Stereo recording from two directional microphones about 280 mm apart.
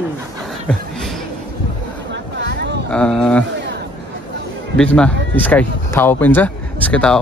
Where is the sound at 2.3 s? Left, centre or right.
Right.